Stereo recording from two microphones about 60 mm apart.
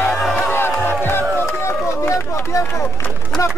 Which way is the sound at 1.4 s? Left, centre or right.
Left.